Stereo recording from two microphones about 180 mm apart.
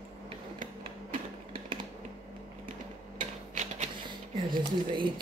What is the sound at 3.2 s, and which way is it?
Typewriter, 40° right (ahead or behind).